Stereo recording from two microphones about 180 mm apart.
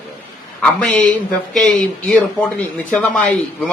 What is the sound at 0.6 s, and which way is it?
Speech, 5° left (ahead or behind).